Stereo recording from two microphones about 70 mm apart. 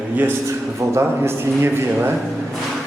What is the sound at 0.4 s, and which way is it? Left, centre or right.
A man's voice, right.